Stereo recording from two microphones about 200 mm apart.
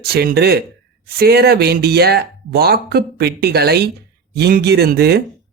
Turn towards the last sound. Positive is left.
turn(degrees=-55)  # may be behind; listen again after turning